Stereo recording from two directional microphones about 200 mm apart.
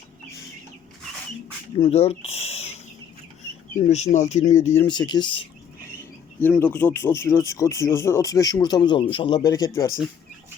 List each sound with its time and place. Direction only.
1.8 s a sound: 30° left (ahead or behind)
3.8 s speech: 35° left (ahead or behind)
4.8 s speech: 20° left (ahead or behind)
6.4 s speech: 10° left (ahead or behind)